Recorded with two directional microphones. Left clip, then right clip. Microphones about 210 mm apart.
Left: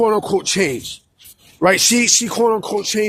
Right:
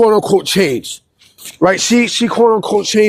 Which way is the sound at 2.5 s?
40° right (ahead or behind).